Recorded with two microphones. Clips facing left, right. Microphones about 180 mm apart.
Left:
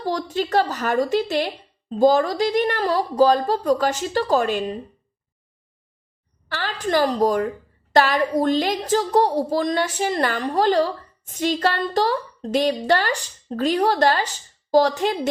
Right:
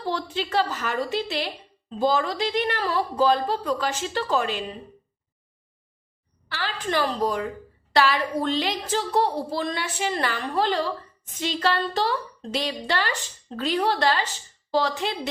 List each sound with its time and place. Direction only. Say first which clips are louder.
0.0 s a woman's voice: left 4 dB; 40° left (ahead or behind)
6.5 s a woman's voice: left 5 dB; 45° left (ahead or behind)